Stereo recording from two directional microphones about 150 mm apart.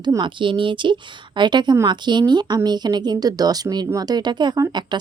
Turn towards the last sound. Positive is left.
turn(degrees=-30)  # may be behind; listen again after turning